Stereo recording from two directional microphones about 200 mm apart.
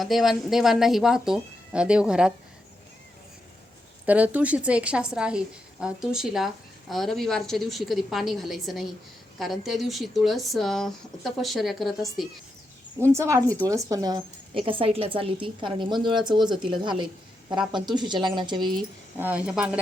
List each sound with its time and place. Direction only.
0.0 s a woman's voice: centre (ahead or behind)
4.0 s a woman's voice: 5° right (ahead or behind)
13.0 s speech: 15° right (ahead or behind)
19.1 s a woman's voice: 10° right (ahead or behind)